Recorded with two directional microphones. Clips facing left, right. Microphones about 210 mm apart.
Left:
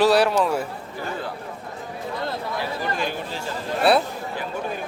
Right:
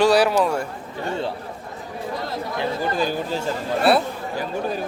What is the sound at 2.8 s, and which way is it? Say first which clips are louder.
Speech: right 4 dB; 35° right (ahead or behind).